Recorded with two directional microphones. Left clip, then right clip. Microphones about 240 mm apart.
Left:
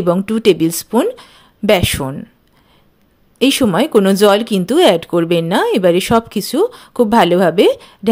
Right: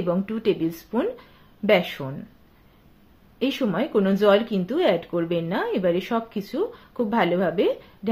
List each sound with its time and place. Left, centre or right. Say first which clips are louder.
0.0 s speech: left 11 dB; left
3.3 s speech: left 12 dB; left